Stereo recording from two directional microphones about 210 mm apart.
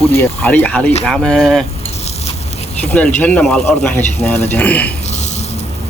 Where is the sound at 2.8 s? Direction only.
5° left (ahead or behind).